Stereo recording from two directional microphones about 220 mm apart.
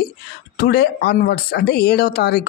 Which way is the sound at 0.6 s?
45° left (ahead or behind).